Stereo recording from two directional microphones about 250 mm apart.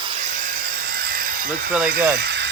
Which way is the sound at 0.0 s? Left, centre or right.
Right.